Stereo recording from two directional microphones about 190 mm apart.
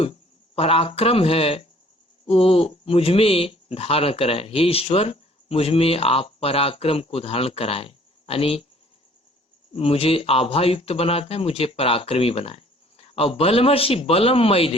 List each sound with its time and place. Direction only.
0.0 s speech: 30° left (ahead or behind)
9.7 s speech: 30° left (ahead or behind)